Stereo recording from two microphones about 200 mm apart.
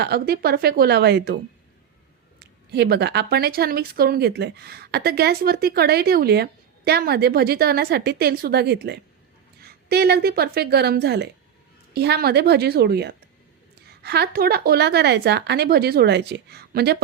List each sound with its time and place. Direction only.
0.0 s speech: 50° right (ahead or behind)
2.4 s a woman's voice: 55° right (ahead or behind)